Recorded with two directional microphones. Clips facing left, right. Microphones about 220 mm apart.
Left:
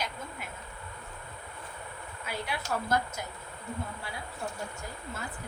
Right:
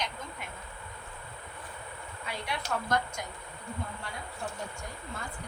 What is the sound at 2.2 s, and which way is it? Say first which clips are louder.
A woman's voice: left 1 dB; 5° left (ahead or behind).